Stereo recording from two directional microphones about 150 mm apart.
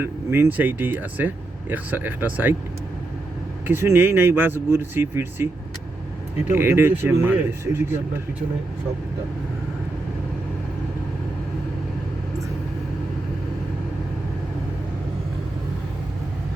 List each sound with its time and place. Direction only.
0.0 s speech: 15° right (ahead or behind)
3.7 s speech: 15° right (ahead or behind)
6.5 s speech: 15° right (ahead or behind)